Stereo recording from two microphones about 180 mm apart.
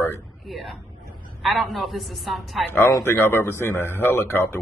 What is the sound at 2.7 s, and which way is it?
Speech, 15° left (ahead or behind).